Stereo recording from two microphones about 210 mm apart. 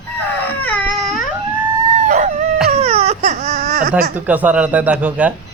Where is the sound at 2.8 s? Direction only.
30° right (ahead or behind).